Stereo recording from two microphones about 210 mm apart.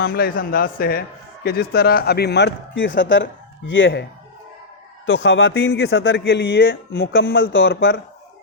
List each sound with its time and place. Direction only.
0.0 s speech: 45° left (ahead or behind); by 4.0 s 60° left (ahead or behind)
5.0 s speech: 65° left (ahead or behind)